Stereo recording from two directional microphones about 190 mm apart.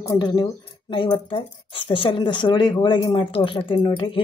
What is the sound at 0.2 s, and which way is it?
Speech, 20° left (ahead or behind).